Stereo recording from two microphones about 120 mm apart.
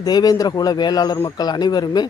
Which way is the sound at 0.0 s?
35° left (ahead or behind).